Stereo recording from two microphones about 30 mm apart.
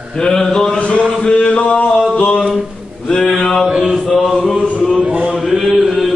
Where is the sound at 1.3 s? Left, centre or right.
Left.